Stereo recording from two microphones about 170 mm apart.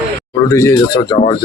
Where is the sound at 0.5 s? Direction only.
20° left (ahead or behind).